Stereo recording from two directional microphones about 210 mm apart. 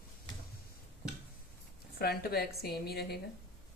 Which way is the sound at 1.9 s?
45° left (ahead or behind).